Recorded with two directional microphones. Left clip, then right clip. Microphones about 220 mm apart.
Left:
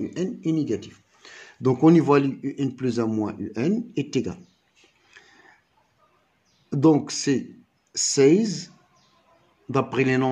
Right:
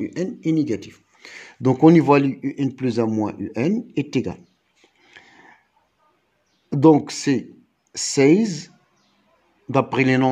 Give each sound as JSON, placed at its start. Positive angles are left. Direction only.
{"t": 0.1, "sound": "speech", "side_deg": -35}
{"t": 5.0, "sound": "a sound", "side_deg": -30}
{"t": 6.7, "sound": "speech", "side_deg": -25}